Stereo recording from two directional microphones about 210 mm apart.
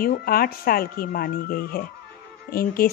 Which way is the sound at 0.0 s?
45° left (ahead or behind).